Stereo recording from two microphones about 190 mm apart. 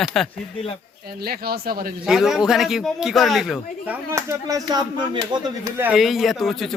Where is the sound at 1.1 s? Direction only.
55° right (ahead or behind).